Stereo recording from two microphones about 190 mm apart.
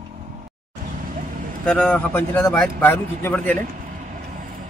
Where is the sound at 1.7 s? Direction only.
5° left (ahead or behind).